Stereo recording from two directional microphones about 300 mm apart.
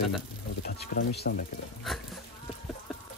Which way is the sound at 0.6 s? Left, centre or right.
Left.